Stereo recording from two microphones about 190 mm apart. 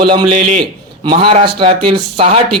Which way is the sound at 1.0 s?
25° right (ahead or behind).